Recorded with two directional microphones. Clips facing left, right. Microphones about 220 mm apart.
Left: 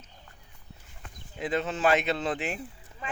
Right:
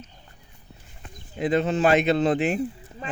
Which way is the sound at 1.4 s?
60° right (ahead or behind).